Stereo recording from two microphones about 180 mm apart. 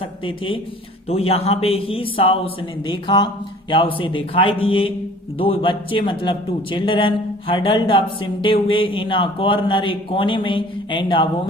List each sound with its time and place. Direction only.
0.0 s a man's voice: 30° left (ahead or behind)